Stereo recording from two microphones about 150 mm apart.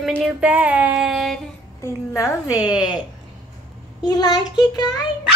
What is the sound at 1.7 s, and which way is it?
Child singing, 20° left (ahead or behind).